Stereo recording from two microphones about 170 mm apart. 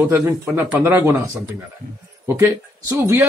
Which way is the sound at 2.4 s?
15° right (ahead or behind).